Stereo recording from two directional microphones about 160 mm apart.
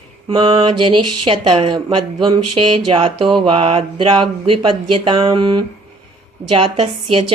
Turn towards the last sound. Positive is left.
turn(degrees=-35)  # may be behind; listen again after turning